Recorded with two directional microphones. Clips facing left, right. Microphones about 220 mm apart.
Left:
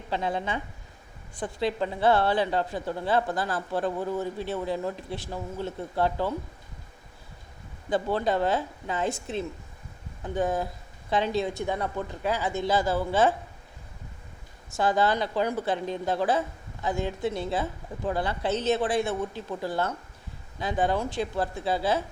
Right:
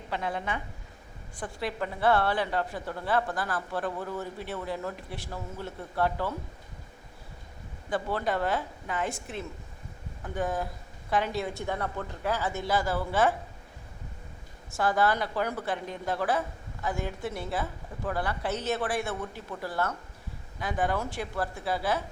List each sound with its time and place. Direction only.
0.1 s a woman's voice: 25° left (ahead or behind)
7.9 s a woman's voice: 25° left (ahead or behind)
14.7 s a woman's voice: 20° left (ahead or behind)